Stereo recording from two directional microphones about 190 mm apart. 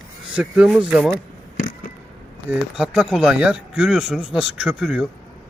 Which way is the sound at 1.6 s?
45° left (ahead or behind).